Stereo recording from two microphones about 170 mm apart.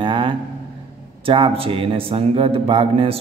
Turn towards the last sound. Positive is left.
turn(degrees=-35)  # may be behind; listen again after turning